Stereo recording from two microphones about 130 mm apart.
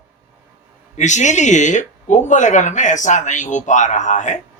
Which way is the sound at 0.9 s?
65° left (ahead or behind).